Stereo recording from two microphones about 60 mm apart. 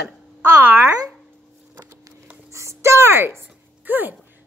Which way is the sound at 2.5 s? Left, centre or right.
Right.